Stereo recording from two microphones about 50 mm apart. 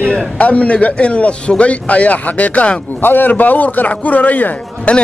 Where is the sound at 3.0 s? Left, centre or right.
Left.